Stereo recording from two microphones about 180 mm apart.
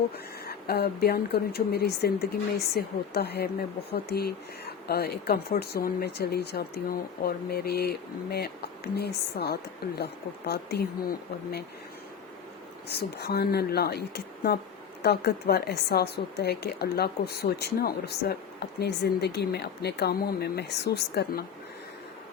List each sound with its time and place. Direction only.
0.4 s a woman's voice: 60° left (ahead or behind)
12.9 s a woman's voice: 60° left (ahead or behind)